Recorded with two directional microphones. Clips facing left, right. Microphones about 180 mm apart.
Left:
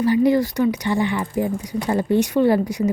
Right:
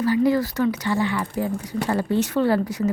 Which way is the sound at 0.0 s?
20° left (ahead or behind).